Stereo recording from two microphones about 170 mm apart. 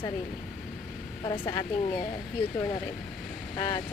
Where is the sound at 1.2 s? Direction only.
25° left (ahead or behind).